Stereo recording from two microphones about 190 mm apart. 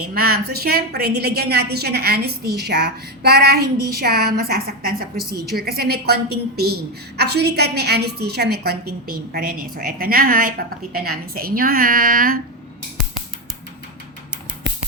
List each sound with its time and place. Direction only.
0.1 s a woman's voice: 50° right (ahead or behind)